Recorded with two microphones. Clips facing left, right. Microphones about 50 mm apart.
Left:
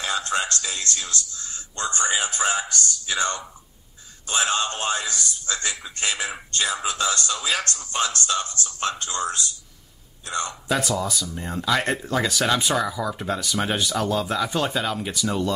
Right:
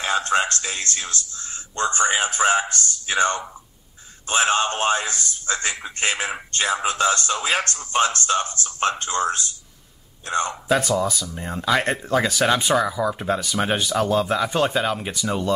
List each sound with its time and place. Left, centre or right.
0.0 s a man's voice: right
10.9 s speech: centre